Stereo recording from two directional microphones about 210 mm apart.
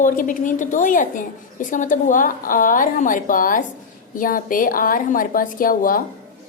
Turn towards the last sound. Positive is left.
turn(degrees=40)  # may be behind; listen again after turning